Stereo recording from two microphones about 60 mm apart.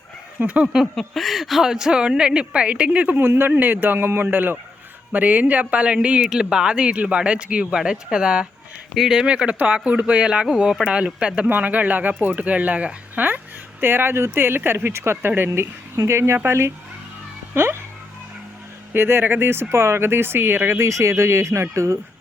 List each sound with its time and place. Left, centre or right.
0.3 s speech: right
0.9 s speech: centre; by 3.2 s right
3.2 s speech: right; by 9.2 s centre
9.2 s speech: centre
11.4 s speech: right
13.8 s speech: right
18.9 s speech: right